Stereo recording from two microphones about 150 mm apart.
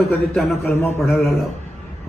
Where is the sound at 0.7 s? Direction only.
15° left (ahead or behind).